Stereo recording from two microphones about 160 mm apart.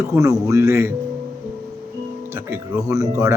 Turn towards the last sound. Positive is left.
turn(degrees=-20)  # may be behind; listen again after turning